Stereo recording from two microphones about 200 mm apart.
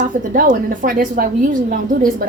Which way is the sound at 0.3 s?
45° right (ahead or behind).